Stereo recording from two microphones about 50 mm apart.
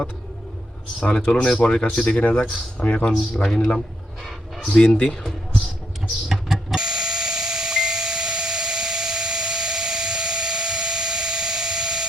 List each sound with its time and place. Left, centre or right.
0.9 s speech: left
3.4 s speech: centre
4.7 s speech: centre
6.2 s a sound: centre